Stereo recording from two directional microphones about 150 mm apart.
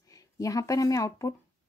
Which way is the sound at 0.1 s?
25° left (ahead or behind).